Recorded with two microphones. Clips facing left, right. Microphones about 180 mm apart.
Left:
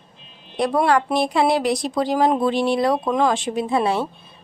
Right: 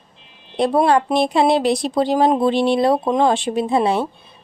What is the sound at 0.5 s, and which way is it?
A woman's voice, 25° right (ahead or behind).